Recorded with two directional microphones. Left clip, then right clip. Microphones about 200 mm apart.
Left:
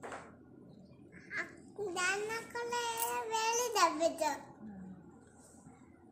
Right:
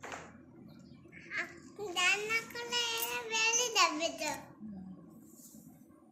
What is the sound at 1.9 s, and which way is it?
Child singing, 30° left (ahead or behind).